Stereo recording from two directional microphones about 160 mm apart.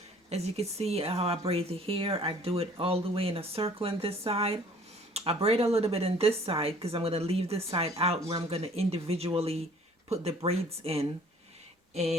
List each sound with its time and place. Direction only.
0.3 s speech: 40° right (ahead or behind)